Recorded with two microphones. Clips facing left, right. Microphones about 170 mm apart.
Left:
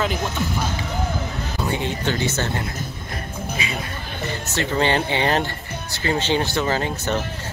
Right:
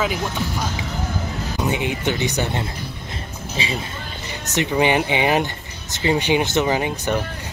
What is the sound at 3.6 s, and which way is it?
Speech, 30° right (ahead or behind).